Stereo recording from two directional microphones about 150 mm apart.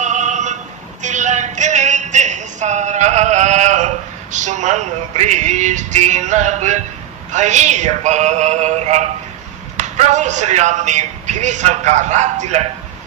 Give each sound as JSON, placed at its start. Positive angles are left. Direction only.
{"t": 0.0, "sound": "a sound", "side_deg": -55}
{"t": 1.0, "sound": "music", "side_deg": -55}
{"t": 7.3, "sound": "a man's voice", "side_deg": -50}